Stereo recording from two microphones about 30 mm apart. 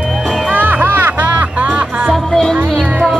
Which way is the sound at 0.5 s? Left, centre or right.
Right.